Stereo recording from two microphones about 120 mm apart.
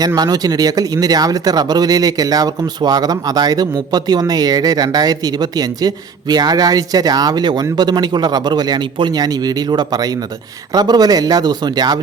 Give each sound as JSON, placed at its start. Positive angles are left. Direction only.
{"t": 0.2, "sound": "speech", "side_deg": -35}